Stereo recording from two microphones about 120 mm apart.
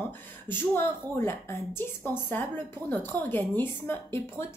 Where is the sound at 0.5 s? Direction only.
20° left (ahead or behind).